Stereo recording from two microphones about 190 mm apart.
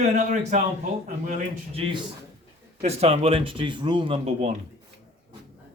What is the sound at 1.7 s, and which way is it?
Speech, 30° right (ahead or behind).